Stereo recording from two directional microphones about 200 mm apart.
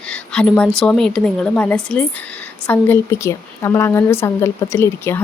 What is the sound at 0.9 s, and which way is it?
Speech, 5° left (ahead or behind).